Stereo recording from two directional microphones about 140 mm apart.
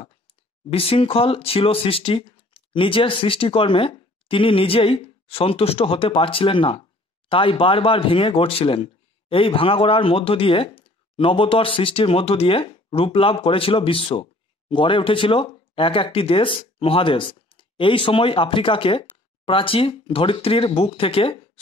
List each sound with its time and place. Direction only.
0.7 s speech: 45° left (ahead or behind)